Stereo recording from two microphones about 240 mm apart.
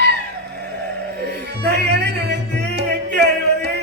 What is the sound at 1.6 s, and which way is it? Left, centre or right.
Music, right.